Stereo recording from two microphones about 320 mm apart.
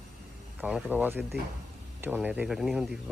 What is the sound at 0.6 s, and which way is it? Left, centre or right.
Speech, centre.